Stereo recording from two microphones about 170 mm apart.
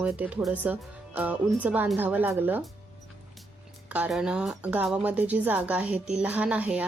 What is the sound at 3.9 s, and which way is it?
Speech, 5° right (ahead or behind).